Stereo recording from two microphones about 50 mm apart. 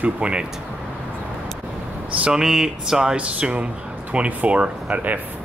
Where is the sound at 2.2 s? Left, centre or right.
Centre.